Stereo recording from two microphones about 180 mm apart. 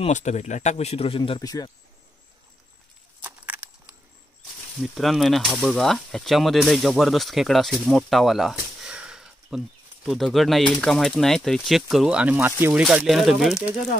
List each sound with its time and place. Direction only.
0.0 s speech: 40° left (ahead or behind)
1.4 s speech: 20° left (ahead or behind)
3.3 s a sound: 10° right (ahead or behind)
4.8 s speech: centre (ahead or behind)